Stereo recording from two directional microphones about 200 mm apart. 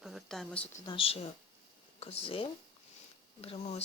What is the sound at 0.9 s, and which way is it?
Speech, 25° left (ahead or behind).